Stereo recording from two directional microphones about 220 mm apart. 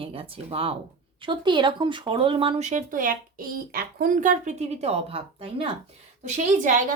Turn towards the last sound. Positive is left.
turn(degrees=-35)  # may be behind; listen again after turning